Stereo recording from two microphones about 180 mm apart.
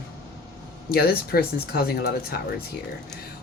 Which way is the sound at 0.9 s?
60° left (ahead or behind).